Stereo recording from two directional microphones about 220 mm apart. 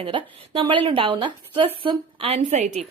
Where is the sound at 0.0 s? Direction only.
25° right (ahead or behind).